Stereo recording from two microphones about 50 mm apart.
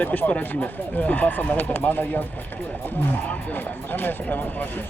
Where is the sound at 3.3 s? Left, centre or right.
Left.